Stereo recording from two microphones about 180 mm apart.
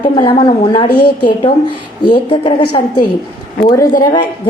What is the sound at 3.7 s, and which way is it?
Speech, 20° left (ahead or behind).